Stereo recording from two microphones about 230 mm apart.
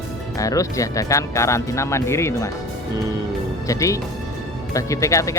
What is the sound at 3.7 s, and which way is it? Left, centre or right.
Speech, centre.